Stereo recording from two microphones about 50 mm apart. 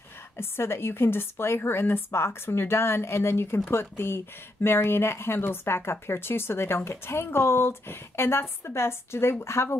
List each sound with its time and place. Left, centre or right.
0.4 s speech: left